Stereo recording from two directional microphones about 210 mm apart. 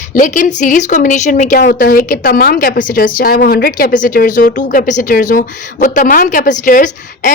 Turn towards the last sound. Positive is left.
turn(degrees=40)  # may be behind; listen again after turning